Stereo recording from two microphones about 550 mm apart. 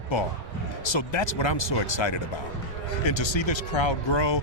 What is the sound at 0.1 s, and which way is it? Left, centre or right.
A man's voice, left.